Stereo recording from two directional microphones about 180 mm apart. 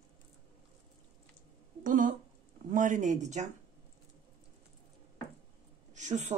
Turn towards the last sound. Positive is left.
turn(degrees=-40)  # may be behind; listen again after turning